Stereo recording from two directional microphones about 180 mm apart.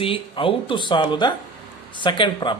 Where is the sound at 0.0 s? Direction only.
30° left (ahead or behind).